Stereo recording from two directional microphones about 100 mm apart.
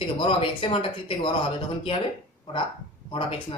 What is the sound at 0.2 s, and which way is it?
A woman's voice, 60° left (ahead or behind).